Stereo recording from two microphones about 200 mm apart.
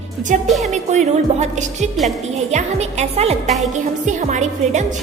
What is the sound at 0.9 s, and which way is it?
Speech, 35° right (ahead or behind).